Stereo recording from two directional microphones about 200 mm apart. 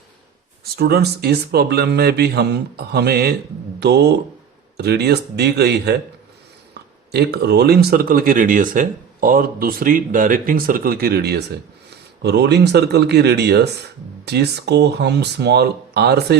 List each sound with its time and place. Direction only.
0.6 s speech: 50° right (ahead or behind)
7.1 s speech: 55° right (ahead or behind)